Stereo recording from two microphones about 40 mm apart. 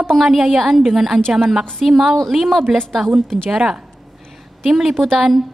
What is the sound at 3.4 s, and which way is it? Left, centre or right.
A woman's voice, centre.